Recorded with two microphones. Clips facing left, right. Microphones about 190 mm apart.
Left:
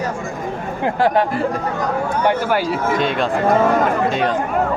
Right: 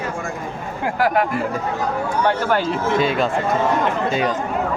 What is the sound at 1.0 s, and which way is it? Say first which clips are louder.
Speech: left 2 dB; 30° left (ahead or behind).